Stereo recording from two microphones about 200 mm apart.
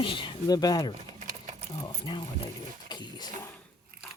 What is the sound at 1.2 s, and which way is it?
Sewing machine, 35° right (ahead or behind).